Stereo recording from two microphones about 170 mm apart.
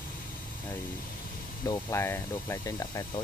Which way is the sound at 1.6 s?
15° left (ahead or behind).